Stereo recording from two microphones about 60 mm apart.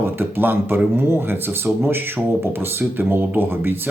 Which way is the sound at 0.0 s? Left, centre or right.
Right.